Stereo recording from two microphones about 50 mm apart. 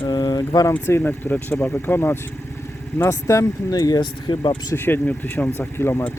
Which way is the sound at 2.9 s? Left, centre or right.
Left.